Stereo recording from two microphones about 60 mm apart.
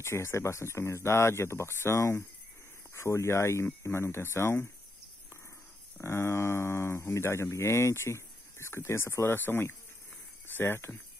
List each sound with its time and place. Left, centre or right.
0.0 s speech: left
6.0 s speech: left